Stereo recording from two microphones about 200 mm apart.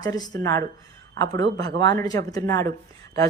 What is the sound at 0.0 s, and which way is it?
A woman's voice, 20° left (ahead or behind).